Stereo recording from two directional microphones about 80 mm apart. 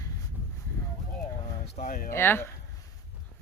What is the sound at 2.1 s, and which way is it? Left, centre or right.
Speech, left.